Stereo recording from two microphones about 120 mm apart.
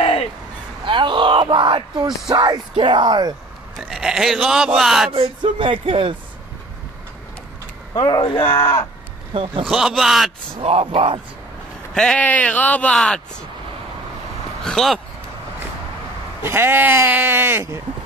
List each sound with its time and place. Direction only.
0.0 s a sound: 55° left (ahead or behind)
0.8 s a sound: 40° right (ahead or behind)
2.2 s speech: 35° right (ahead or behind)
3.9 s speech: 5° right (ahead or behind)
5.1 s speech: 45° right (ahead or behind)
8.0 s speech: 40° left (ahead or behind)
8.5 s speech: 20° left (ahead or behind)
9.3 s speech: 45° right (ahead or behind)
9.7 s speech: 5° right (ahead or behind)
10.6 s speech: 55° right (ahead or behind)
11.9 s speech: 5° left (ahead or behind)
14.6 s speech: 5° left (ahead or behind)
16.4 s speech: 20° right (ahead or behind)